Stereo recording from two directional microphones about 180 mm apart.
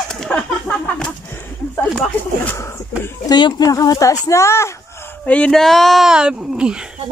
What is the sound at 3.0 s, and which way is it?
Speech, 25° left (ahead or behind).